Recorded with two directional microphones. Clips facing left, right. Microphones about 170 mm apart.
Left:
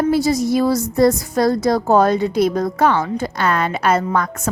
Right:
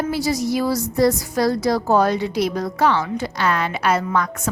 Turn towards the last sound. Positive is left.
turn(degrees=50)  # may be behind; listen again after turning